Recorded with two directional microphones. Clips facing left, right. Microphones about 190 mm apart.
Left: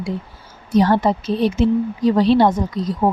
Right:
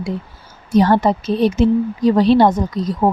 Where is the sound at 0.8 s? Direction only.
45° right (ahead or behind).